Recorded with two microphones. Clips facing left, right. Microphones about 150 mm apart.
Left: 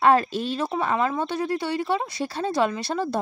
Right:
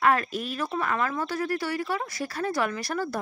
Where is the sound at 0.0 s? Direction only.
30° left (ahead or behind).